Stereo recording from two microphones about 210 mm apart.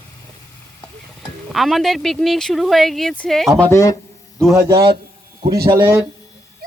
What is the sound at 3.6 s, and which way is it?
Speech, 15° left (ahead or behind).